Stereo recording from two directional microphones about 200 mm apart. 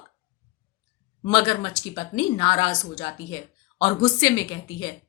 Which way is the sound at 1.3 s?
20° left (ahead or behind).